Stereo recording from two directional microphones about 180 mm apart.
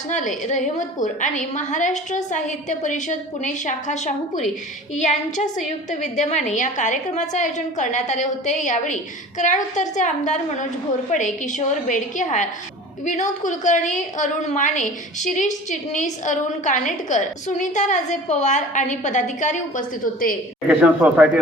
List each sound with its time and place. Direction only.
0.1 s a woman's voice: 40° left (ahead or behind)
20.7 s speech: 5° right (ahead or behind)